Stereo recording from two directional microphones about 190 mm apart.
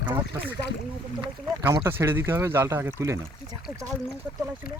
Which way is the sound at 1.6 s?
15° right (ahead or behind).